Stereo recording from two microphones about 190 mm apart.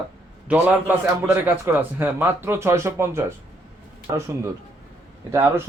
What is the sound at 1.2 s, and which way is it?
Speech, 10° right (ahead or behind).